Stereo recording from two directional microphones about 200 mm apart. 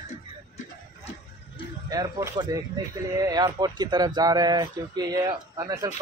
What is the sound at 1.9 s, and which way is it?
Speech, 15° right (ahead or behind).